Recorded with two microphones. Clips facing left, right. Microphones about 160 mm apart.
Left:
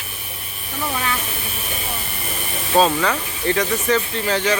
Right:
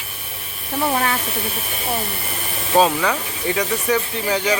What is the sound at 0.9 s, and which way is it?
Speech, 45° right (ahead or behind).